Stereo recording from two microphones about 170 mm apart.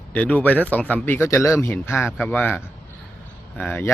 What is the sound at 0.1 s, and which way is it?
A man's voice, 10° left (ahead or behind).